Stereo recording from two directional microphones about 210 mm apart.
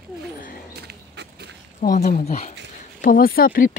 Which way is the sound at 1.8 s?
40° left (ahead or behind).